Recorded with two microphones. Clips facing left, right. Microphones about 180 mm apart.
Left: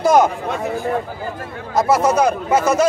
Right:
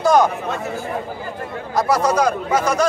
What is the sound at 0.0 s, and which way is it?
Speech, 25° left (ahead or behind).